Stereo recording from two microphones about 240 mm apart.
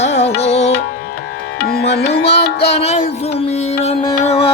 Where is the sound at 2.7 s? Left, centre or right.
Left.